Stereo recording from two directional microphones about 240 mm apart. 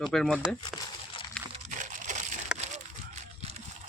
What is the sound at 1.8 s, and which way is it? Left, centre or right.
Crushing, right.